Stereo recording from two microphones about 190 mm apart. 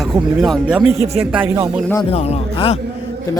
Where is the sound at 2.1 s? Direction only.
30° left (ahead or behind).